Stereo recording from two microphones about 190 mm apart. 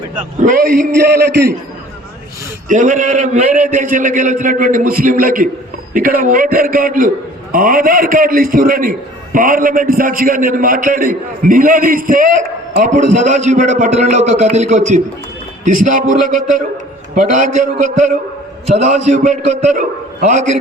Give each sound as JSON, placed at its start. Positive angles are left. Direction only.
{"t": 0.3, "sound": "a man's voice", "side_deg": -50}
{"t": 2.6, "sound": "a man's voice", "side_deg": -45}